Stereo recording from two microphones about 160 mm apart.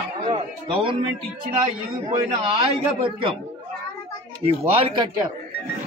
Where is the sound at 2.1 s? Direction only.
35° right (ahead or behind).